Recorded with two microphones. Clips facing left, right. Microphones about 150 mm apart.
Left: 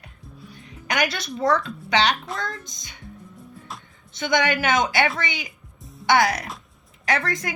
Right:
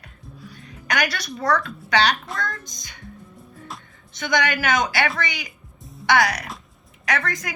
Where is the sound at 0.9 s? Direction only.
25° left (ahead or behind).